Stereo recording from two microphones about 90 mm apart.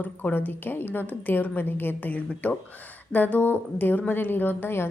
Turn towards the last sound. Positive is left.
turn(degrees=25)  # may be behind; listen again after turning